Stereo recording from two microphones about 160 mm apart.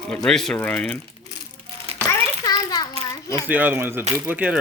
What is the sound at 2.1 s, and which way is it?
Children playing, 25° left (ahead or behind).